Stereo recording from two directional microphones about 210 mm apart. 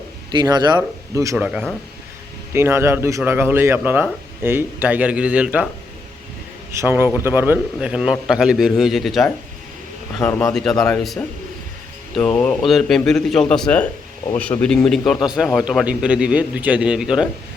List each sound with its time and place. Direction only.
0.3 s a man's voice: 20° right (ahead or behind)
6.8 s speech: 10° right (ahead or behind)